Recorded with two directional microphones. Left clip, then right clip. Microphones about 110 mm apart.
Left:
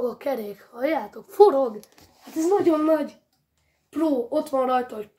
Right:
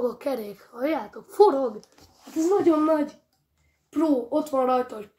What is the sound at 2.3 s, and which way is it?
Speech, 10° left (ahead or behind).